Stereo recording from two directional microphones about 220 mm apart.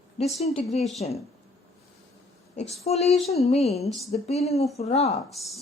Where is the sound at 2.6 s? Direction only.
30° left (ahead or behind).